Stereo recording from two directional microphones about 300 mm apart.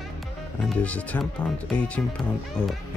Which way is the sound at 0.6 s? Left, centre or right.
Centre.